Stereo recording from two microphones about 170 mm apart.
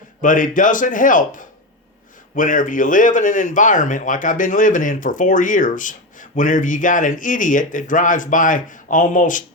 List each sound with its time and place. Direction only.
0.2 s speech: 50° left (ahead or behind)